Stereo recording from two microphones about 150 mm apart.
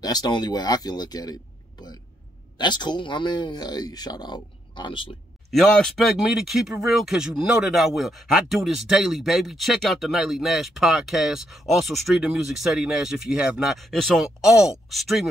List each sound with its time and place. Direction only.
0.0 s speech: 25° left (ahead or behind)
5.5 s speech: centre (ahead or behind)